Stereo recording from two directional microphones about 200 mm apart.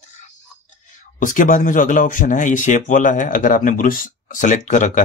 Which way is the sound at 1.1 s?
40° left (ahead or behind).